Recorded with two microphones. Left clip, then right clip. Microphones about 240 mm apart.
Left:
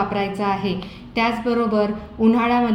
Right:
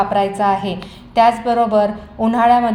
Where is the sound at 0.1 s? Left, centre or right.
Right.